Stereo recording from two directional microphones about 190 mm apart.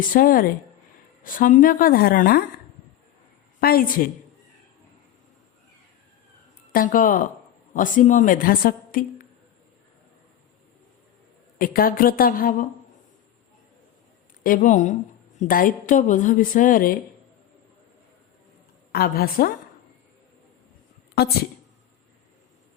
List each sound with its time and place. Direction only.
0.1 s a woman's voice: 50° left (ahead or behind)
3.6 s a woman's voice: 50° left (ahead or behind)
6.7 s a woman's voice: 45° left (ahead or behind)
11.5 s a woman's voice: 50° left (ahead or behind)
14.4 s a woman's voice: 40° left (ahead or behind)
18.9 s a woman's voice: 50° left (ahead or behind)